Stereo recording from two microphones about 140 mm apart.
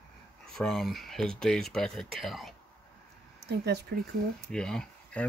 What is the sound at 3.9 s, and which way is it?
Speech, 90° right.